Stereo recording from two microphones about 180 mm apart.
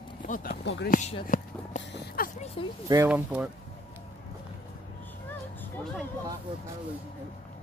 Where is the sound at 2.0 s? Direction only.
55° left (ahead or behind).